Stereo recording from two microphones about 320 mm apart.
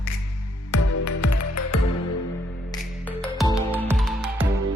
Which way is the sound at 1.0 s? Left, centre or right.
Left.